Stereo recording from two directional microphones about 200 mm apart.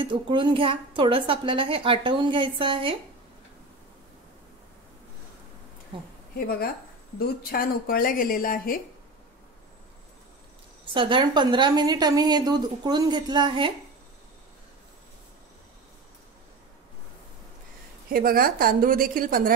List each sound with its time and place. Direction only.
0.0 s a woman's voice: 25° right (ahead or behind)
5.9 s a woman's voice: 25° right (ahead or behind)
7.2 s speech: 45° left (ahead or behind)
10.9 s a woman's voice: 25° right (ahead or behind)
18.1 s a woman's voice: 45° right (ahead or behind)